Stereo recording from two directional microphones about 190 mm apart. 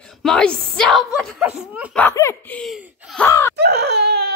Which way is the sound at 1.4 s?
10° right (ahead or behind).